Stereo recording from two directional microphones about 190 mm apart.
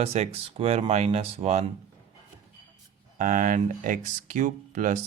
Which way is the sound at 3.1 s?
40° right (ahead or behind).